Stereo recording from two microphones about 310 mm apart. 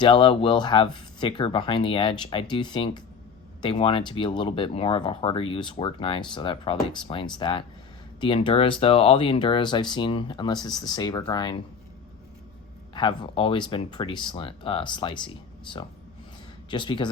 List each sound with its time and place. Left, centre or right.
0.0 s speech: centre
12.9 s speech: centre